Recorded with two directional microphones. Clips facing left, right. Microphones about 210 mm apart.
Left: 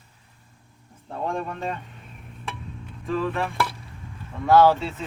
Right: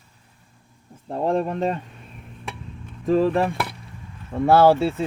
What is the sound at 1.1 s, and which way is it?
Speech, 35° right (ahead or behind).